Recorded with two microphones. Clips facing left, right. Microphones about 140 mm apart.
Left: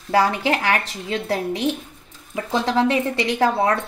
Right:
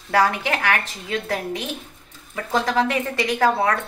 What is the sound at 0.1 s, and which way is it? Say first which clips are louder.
A woman's voice: left 1 dB; 30° left (ahead or behind).